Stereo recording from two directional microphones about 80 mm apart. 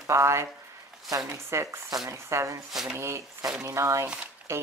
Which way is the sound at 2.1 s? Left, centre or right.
Right.